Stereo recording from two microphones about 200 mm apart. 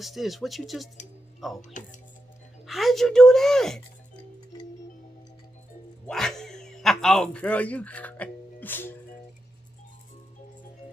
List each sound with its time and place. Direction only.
0.0 s speech: centre (ahead or behind)
1.6 s speech: 40° left (ahead or behind)
2.6 s a woman's voice: centre (ahead or behind)
6.0 s speech: centre (ahead or behind)